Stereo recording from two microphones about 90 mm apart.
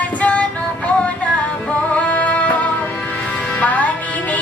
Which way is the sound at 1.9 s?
15° left (ahead or behind).